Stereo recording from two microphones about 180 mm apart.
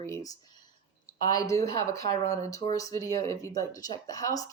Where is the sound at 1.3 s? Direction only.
20° left (ahead or behind).